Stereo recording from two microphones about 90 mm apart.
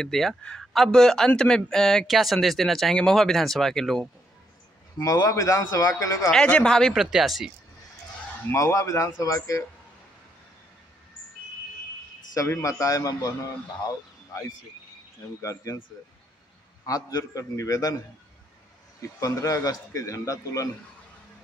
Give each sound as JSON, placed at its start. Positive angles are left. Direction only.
{"t": 0.0, "sound": "a man's voice", "side_deg": 5}
{"t": 5.0, "sound": "a man's voice", "side_deg": 40}
{"t": 6.3, "sound": "speech", "side_deg": 10}
{"t": 6.9, "sound": "a man's voice", "side_deg": -5}
{"t": 8.5, "sound": "a man's voice", "side_deg": 35}
{"t": 12.4, "sound": "a man's voice", "side_deg": 35}
{"t": 15.4, "sound": "a man's voice", "side_deg": 35}
{"t": 16.8, "sound": "a man's voice", "side_deg": 40}
{"t": 18.9, "sound": "a man's voice", "side_deg": 35}